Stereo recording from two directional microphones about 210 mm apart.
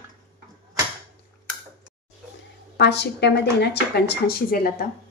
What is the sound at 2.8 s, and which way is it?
Speech, 55° left (ahead or behind).